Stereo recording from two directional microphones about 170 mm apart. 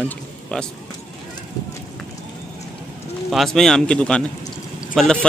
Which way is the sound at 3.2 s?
Centre (ahead or behind).